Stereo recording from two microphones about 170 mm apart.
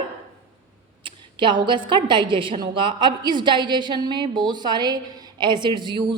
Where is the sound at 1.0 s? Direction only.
30° right (ahead or behind).